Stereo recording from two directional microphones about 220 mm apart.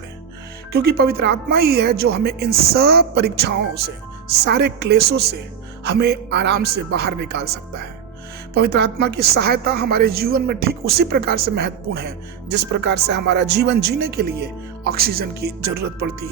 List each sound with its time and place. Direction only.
0.7 s a woman's voice: 45° right (ahead or behind)